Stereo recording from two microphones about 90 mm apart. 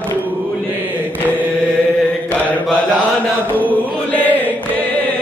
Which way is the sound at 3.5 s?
20° right (ahead or behind).